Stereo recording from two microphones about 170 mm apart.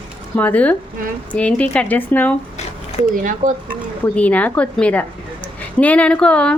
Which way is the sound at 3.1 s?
50° right (ahead or behind).